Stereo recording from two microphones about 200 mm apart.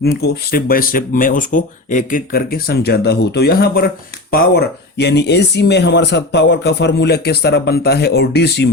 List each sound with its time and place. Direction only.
0.0 s speech: 55° left (ahead or behind)